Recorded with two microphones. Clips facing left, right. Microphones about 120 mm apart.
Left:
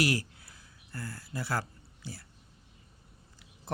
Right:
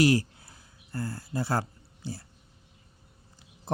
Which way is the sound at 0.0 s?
25° right (ahead or behind).